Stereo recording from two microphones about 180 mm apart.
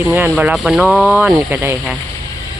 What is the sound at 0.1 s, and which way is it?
Speech, 10° right (ahead or behind).